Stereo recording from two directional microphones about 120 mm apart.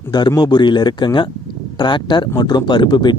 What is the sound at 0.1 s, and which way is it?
Speech, 35° left (ahead or behind).